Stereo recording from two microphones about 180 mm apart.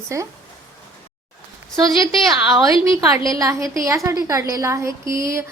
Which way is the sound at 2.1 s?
Centre (ahead or behind).